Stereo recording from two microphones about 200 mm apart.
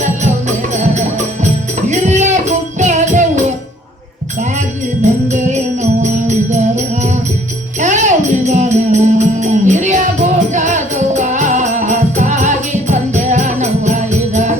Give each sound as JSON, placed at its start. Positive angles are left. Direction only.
{"t": 1.9, "sound": "music", "side_deg": -35}
{"t": 5.3, "sound": "music", "side_deg": -35}